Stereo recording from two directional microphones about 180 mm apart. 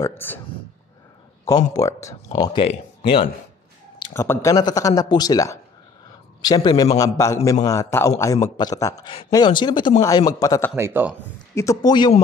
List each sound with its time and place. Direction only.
0.0 s a man's voice: 10° left (ahead or behind)
1.7 s speech: 20° left (ahead or behind)
4.0 s a man's voice: 15° left (ahead or behind)
10.8 s speech: 10° right (ahead or behind)
11.5 s speech: 15° left (ahead or behind)